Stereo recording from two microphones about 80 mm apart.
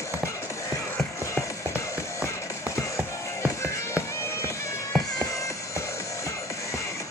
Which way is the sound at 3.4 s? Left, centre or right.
Left.